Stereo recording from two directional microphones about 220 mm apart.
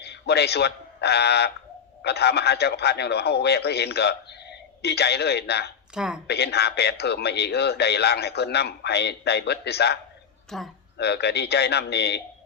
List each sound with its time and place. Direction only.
0.0 s speech: 50° left (ahead or behind)
5.9 s speech: 5° right (ahead or behind)
6.2 s speech: 50° left (ahead or behind)
10.5 s speech: centre (ahead or behind)
10.9 s speech: 50° left (ahead or behind)